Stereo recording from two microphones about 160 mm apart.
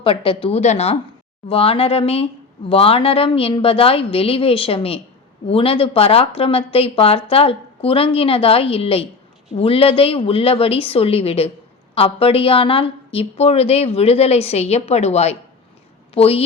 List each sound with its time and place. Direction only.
0.0 s speech: 35° left (ahead or behind)